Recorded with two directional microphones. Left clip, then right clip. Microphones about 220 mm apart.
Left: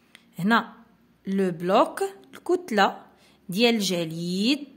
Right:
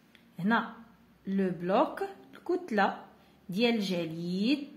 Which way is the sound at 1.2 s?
45° left (ahead or behind).